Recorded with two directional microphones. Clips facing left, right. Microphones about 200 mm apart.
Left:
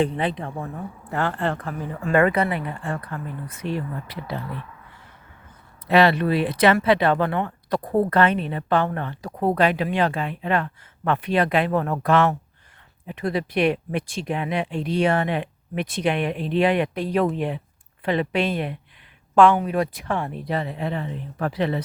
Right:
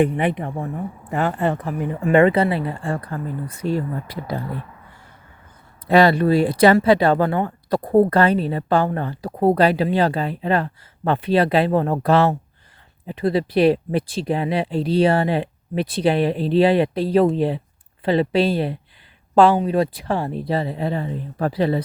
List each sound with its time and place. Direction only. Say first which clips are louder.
0.0 s speech: right 4 dB; 15° right (ahead or behind); by 3.8 s 40° right (ahead or behind)
5.9 s speech: right 3 dB; 40° right (ahead or behind)